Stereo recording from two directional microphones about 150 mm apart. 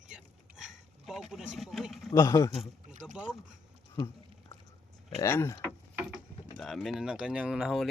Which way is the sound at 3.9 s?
20° left (ahead or behind).